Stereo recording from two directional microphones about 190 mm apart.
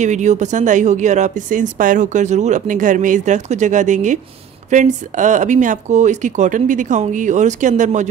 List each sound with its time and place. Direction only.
0.0 s speech: 40° right (ahead or behind)